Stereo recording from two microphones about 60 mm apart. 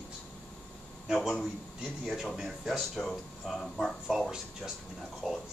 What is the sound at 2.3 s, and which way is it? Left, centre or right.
Speech, centre.